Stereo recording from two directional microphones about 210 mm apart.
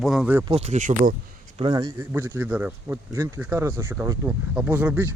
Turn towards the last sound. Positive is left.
turn(degrees=-5)  # may be behind; listen again after turning